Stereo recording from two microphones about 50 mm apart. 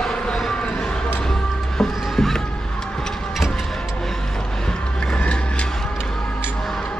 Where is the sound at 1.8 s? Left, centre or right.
Centre.